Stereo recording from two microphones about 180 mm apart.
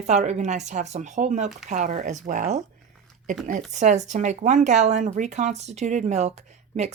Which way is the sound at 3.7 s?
40° right (ahead or behind).